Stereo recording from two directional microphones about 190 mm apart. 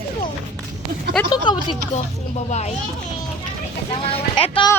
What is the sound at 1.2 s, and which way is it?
Speech, 25° left (ahead or behind).